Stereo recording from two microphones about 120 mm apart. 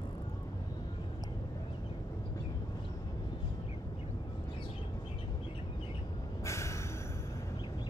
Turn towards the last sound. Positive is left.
turn(degrees=25)  # may be behind; listen again after turning